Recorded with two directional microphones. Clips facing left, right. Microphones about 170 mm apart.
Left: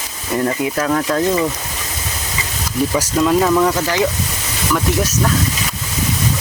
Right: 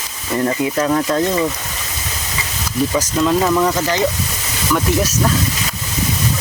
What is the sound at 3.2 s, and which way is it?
Speech, 5° left (ahead or behind).